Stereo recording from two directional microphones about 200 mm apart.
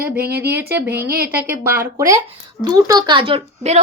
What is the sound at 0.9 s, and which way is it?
Speech, 50° right (ahead or behind).